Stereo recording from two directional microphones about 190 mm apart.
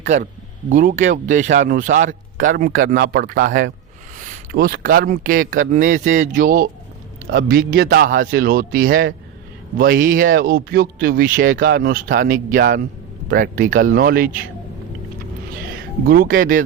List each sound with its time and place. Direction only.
0.0 s speech: 40° right (ahead or behind)
16.0 s speech: 50° right (ahead or behind)